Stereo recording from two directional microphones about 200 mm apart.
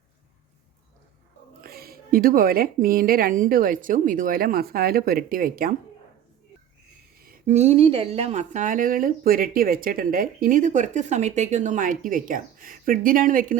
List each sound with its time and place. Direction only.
1.6 s speech: 50° right (ahead or behind)
7.2 s speech: 40° right (ahead or behind)